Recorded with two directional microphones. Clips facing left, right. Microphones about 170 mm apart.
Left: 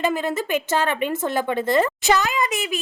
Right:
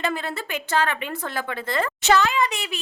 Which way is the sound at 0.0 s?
15° left (ahead or behind).